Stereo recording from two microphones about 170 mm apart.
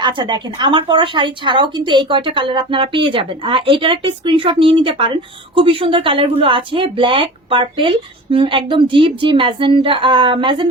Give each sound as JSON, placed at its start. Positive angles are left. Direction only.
{"t": 0.0, "sound": "a woman's voice", "side_deg": -30}